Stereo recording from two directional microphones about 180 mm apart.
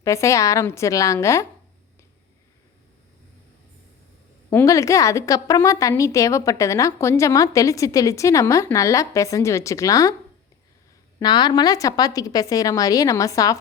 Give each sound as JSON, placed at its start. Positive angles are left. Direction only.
{"t": 0.0, "sound": "a woman's voice", "side_deg": 15}
{"t": 4.4, "sound": "a woman's voice", "side_deg": 15}
{"t": 11.2, "sound": "a woman's voice", "side_deg": 25}